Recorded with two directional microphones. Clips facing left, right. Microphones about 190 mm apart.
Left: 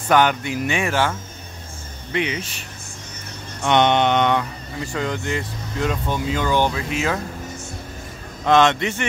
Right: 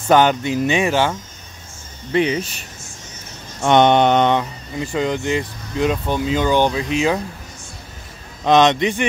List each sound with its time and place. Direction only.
0.1 s speech: 25° right (ahead or behind)
2.1 s mantra: 35° right (ahead or behind)
3.6 s mantra: 40° right (ahead or behind)
4.3 s speech: 20° right (ahead or behind)
8.5 s a man's voice: 20° right (ahead or behind)